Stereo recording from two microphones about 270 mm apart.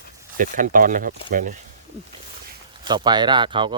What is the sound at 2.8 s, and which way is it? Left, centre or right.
Speech, centre.